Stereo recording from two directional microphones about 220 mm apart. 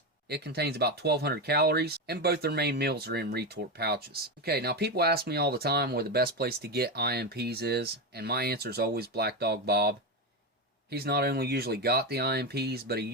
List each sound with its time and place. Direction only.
0.3 s speech: 45° right (ahead or behind)